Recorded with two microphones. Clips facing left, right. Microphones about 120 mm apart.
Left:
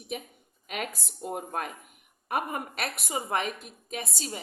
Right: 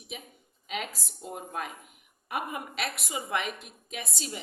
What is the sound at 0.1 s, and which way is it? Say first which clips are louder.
A woman's voice: left 7 dB; 50° left (ahead or behind).